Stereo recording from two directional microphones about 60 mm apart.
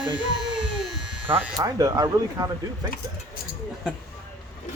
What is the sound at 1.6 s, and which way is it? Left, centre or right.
Speech, right.